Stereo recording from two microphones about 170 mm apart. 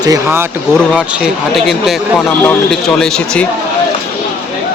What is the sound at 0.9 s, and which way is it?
Speech, 5° right (ahead or behind).